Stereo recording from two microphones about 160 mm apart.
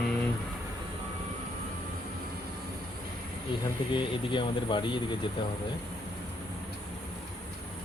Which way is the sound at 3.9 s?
30° left (ahead or behind).